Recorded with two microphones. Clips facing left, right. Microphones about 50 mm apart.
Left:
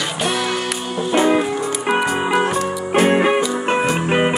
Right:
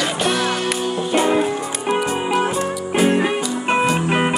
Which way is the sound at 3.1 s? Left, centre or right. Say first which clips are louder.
Left 3 dB; left.